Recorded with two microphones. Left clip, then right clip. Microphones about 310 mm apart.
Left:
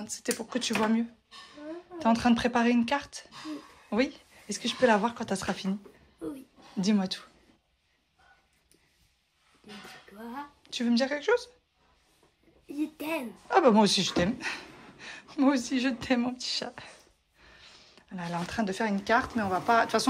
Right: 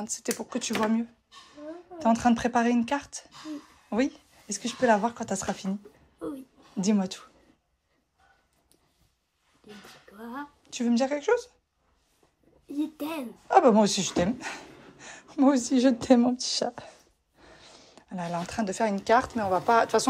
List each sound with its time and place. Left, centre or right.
0.0 s speech: centre
0.4 s a woman's voice: centre
10.1 s a woman's voice: centre
12.7 s speech: centre